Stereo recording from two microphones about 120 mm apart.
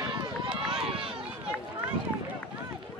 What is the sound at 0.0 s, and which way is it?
Run, 40° right (ahead or behind).